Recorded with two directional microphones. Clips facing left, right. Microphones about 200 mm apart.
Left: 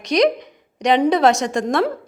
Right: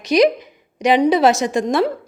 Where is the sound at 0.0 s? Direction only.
5° right (ahead or behind).